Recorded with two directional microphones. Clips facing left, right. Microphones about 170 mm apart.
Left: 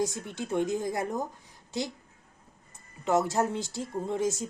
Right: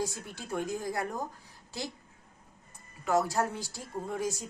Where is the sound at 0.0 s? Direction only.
20° left (ahead or behind).